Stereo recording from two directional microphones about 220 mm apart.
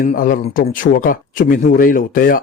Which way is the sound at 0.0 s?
35° left (ahead or behind).